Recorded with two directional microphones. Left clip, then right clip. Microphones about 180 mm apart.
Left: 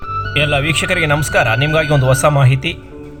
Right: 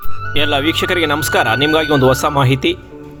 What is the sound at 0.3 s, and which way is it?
Speech, 55° right (ahead or behind).